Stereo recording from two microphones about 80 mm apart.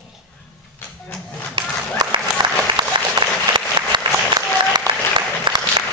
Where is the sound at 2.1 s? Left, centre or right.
Right.